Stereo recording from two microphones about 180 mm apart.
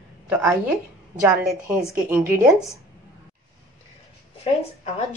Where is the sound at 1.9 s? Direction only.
10° right (ahead or behind).